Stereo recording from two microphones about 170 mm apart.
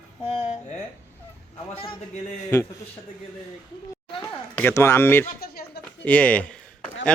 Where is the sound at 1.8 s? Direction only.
35° left (ahead or behind).